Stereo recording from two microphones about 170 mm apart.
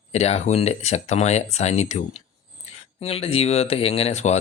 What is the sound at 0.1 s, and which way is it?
Speech, 40° left (ahead or behind).